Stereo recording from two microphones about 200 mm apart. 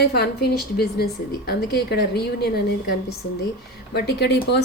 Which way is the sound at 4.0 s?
55° left (ahead or behind).